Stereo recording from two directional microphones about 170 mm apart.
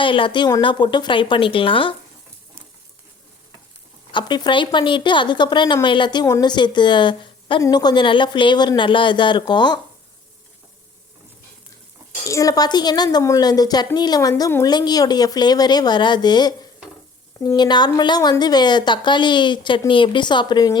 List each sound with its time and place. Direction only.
0.0 s speech: 30° left (ahead or behind)
4.1 s speech: 25° left (ahead or behind)
12.2 s speech: 20° left (ahead or behind)